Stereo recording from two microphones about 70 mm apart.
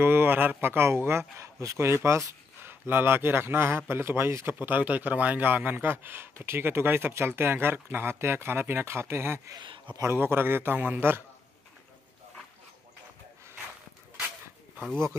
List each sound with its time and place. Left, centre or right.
0.0 s a man's voice: right
2.0 s a sound: right
2.7 s a man's voice: right
4.6 s a man's voice: right
9.5 s speech: right
10.0 s a man's voice: right